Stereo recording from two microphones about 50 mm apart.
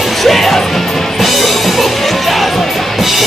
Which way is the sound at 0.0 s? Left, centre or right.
Centre.